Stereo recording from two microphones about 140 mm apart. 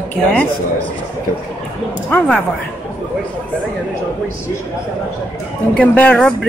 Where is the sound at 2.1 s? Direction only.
5° left (ahead or behind).